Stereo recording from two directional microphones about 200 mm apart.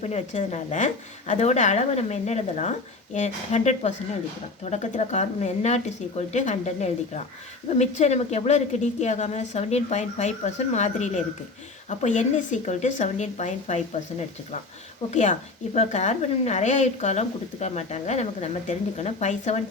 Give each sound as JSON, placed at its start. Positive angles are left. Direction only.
{"t": 0.0, "sound": "a woman's voice", "side_deg": 35}
{"t": 15.1, "sound": "a woman's voice", "side_deg": 35}